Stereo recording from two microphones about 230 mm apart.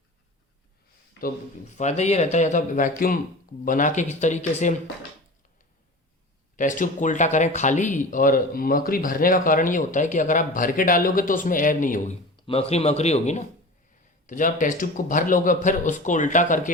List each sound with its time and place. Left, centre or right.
1.7 s speech: left
6.6 s speech: left